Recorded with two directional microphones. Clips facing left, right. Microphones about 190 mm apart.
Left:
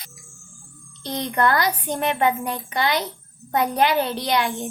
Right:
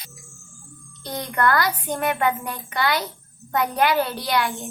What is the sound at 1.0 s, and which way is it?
A child's voice, 20° left (ahead or behind).